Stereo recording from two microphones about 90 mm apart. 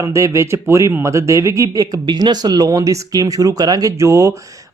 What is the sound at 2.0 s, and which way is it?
A man's voice, 50° right (ahead or behind).